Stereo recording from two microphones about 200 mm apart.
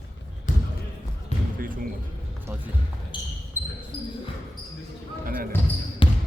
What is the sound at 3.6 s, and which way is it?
Basketball bounce, 10° right (ahead or behind).